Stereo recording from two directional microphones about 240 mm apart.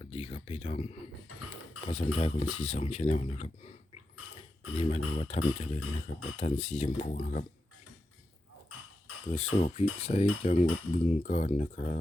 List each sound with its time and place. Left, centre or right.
0.0 s a sound: left
1.8 s speech: left
4.8 s speech: left
9.6 s speech: left